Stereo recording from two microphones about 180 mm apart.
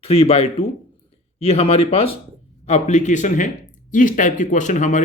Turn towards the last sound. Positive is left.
turn(degrees=40)  # may be behind; listen again after turning